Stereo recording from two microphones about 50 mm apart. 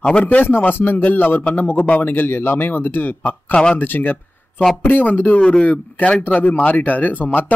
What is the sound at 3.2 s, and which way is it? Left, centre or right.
Speech, left.